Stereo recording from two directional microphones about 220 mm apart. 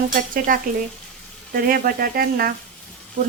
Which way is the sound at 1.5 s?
40° right (ahead or behind).